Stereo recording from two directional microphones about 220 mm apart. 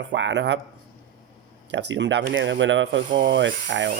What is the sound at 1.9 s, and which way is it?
A man's voice, 55° right (ahead or behind).